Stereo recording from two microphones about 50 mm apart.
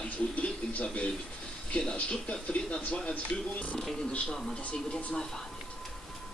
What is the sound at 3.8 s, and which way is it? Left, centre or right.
Speech, centre.